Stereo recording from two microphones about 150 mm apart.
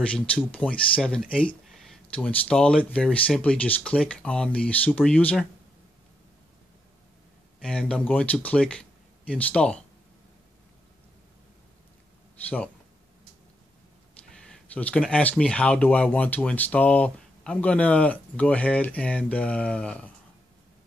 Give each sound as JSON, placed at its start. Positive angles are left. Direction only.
{"t": 0.5, "sound": "speech", "side_deg": 10}
{"t": 7.6, "sound": "speech", "side_deg": 5}
{"t": 12.4, "sound": "speech", "side_deg": 10}
{"t": 14.3, "sound": "speech", "side_deg": 5}